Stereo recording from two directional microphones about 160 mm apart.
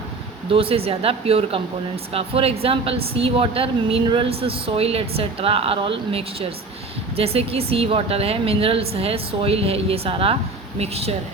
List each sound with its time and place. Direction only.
0.5 s a woman's voice: 35° right (ahead or behind)